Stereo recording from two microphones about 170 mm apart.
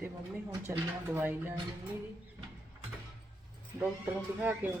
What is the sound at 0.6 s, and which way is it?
Speech, 15° right (ahead or behind).